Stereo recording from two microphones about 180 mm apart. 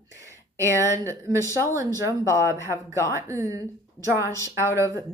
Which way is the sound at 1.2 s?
15° left (ahead or behind).